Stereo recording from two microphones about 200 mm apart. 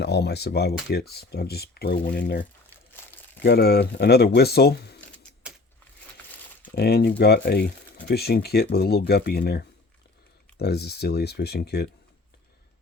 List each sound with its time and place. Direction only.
0.0 s speech: 55° left (ahead or behind)
2.9 s crumpling: 10° left (ahead or behind)
3.4 s speech: 55° left (ahead or behind)
4.9 s a sound: 5° left (ahead or behind)
6.7 s speech: 55° left (ahead or behind)